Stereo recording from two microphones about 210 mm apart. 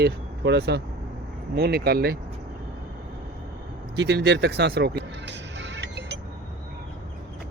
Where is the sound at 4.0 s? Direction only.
50° right (ahead or behind).